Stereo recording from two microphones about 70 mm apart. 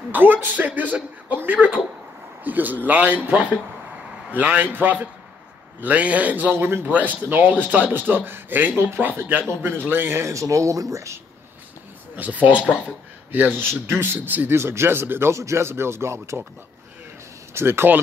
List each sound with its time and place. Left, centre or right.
0.1 s a man's voice: right
10.2 s speech: right
12.2 s speech: right
12.5 s speech: left
12.8 s speech: right
14.6 s speech: right
17.6 s speech: right